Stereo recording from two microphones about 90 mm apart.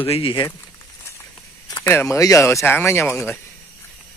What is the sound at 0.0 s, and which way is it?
Speech, 70° left (ahead or behind).